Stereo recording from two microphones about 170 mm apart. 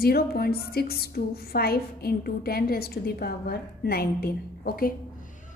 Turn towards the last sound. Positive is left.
turn(degrees=60)  # may be behind; listen again after turning